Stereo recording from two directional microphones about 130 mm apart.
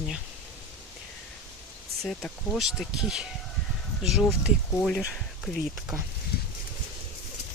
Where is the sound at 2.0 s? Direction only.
5° left (ahead or behind).